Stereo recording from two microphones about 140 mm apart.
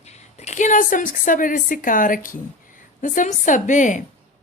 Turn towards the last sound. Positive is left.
turn(degrees=65)  # may be behind; listen again after turning